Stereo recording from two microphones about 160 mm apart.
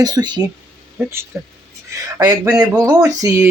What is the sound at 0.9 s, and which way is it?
Speech, 15° right (ahead or behind).